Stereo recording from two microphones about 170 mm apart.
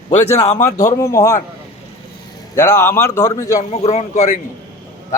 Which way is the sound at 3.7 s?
40° left (ahead or behind).